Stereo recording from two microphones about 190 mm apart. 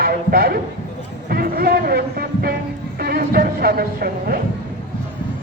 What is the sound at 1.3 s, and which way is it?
Speech, 50° right (ahead or behind).